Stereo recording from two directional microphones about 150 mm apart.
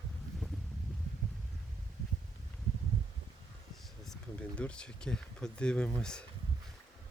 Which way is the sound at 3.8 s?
Centre (ahead or behind).